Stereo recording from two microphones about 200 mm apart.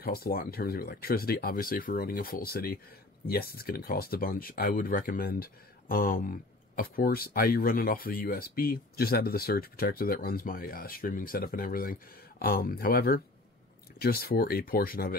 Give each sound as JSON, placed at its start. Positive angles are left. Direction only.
{"t": 0.0, "sound": "speech", "side_deg": 50}